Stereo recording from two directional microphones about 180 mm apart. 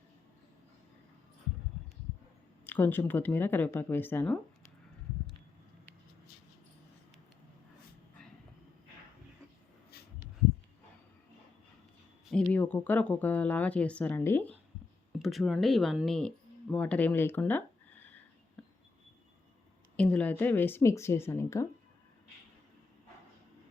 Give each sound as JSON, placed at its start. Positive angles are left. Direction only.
{"t": 2.6, "sound": "speech", "side_deg": 10}
{"t": 10.0, "sound": "a sound", "side_deg": 60}
{"t": 12.3, "sound": "speech", "side_deg": 10}
{"t": 15.2, "sound": "speech", "side_deg": 0}
{"t": 18.6, "sound": "a sound", "side_deg": 5}
{"t": 20.0, "sound": "speech", "side_deg": 5}